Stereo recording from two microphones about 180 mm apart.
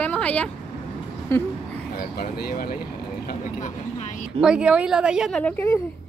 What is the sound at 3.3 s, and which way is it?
Vehicle, 45° left (ahead or behind).